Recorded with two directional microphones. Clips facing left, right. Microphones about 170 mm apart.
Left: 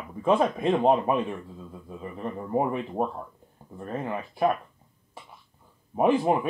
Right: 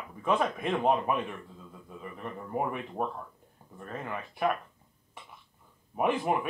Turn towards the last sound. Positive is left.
turn(degrees=30)  # may be behind; listen again after turning